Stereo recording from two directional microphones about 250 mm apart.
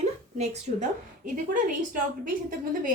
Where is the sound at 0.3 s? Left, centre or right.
Right.